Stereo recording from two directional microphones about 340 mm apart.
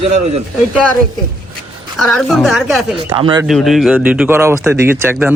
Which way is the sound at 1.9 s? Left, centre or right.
Centre.